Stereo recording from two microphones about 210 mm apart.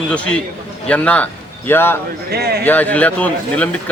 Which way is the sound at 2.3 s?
50° right (ahead or behind).